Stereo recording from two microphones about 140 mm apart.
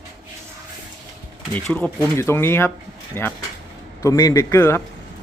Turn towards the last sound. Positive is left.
turn(degrees=15)  # may be behind; listen again after turning